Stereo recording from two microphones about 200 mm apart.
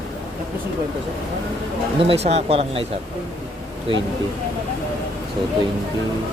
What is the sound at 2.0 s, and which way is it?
Speech, 30° right (ahead or behind).